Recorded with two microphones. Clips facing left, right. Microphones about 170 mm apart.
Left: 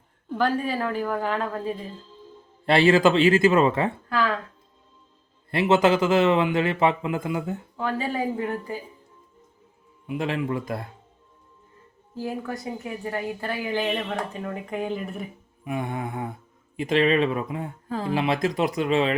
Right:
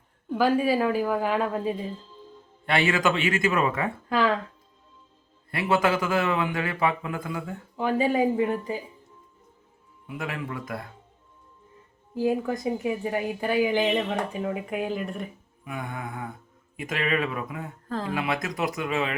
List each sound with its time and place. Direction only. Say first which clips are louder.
0.3 s a woman's voice: right 3 dB; 5° right (ahead or behind)
2.6 s speech: left 6 dB; 30° left (ahead or behind)
5.5 s speech: left 4 dB; 25° left (ahead or behind)
7.8 s a woman's voice: right 5 dB; 15° right (ahead or behind)
10.1 s speech: left 7 dB; 25° left (ahead or behind)
12.1 s a woman's voice: right 5 dB; 15° right (ahead or behind); by 15.3 s centre (ahead or behind)
15.6 s speech: left 5 dB; 25° left (ahead or behind)
17.8 s speech: even; 10° left (ahead or behind)
18.1 s speech: left 7 dB; 25° left (ahead or behind)